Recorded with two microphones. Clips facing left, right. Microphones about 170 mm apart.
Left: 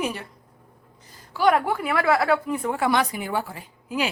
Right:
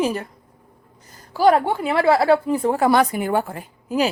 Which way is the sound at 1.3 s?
35° right (ahead or behind).